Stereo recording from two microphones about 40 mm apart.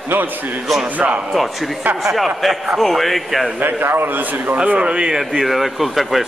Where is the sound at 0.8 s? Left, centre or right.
Right.